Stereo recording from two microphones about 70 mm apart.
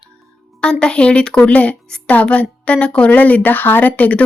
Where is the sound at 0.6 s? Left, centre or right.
Centre.